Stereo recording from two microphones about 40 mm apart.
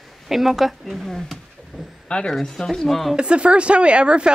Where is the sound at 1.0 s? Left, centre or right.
Centre.